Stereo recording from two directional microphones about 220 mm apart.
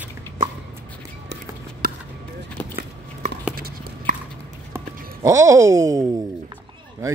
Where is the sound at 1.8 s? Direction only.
45° right (ahead or behind).